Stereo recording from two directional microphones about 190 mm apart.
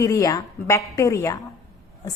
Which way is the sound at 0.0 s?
20° left (ahead or behind).